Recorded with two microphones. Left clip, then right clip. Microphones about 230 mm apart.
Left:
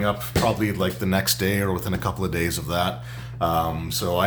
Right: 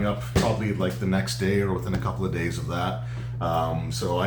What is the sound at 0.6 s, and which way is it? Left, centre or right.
Speech, left.